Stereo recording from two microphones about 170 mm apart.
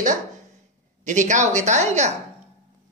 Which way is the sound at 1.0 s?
45° right (ahead or behind).